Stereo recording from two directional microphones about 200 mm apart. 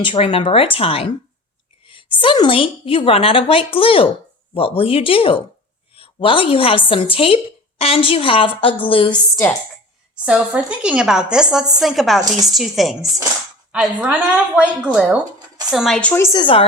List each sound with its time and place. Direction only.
0.0 s a woman's voice: 25° left (ahead or behind)
2.1 s a woman's voice: 25° left (ahead or behind)
10.2 s a woman's voice: 5° right (ahead or behind); by 16.6 s 25° left (ahead or behind)